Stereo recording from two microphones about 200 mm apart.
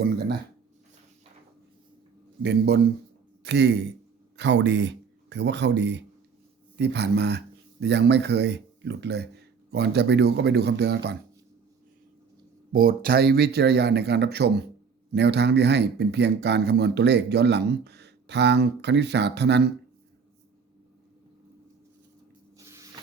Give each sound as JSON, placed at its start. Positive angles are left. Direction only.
{"t": 0.0, "sound": "speech", "side_deg": -55}
{"t": 2.4, "sound": "speech", "side_deg": -55}
{"t": 12.7, "sound": "speech", "side_deg": -45}
{"t": 22.5, "sound": "spray", "side_deg": -15}